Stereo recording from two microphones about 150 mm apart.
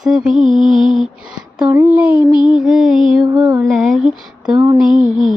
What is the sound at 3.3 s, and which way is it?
Music, 20° right (ahead or behind).